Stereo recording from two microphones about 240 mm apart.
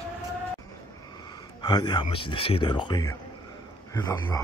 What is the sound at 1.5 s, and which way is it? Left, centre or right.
Speech, centre.